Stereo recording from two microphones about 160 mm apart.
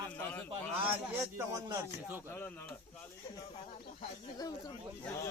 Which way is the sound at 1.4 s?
20° right (ahead or behind).